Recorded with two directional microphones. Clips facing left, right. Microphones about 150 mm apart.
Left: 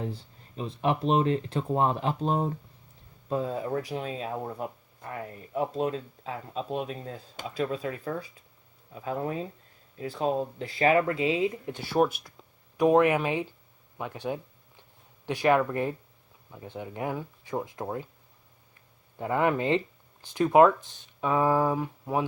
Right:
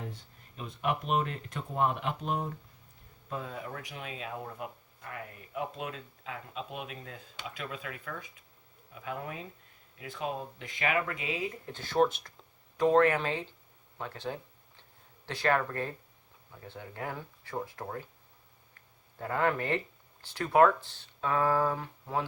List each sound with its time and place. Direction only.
0.0 s speech: 30° left (ahead or behind)
19.2 s speech: 20° left (ahead or behind)